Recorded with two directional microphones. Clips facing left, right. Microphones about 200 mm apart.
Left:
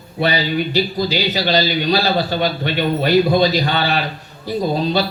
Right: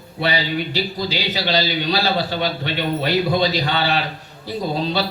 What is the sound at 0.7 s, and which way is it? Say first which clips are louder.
A man's voice: left 5 dB; 45° left (ahead or behind).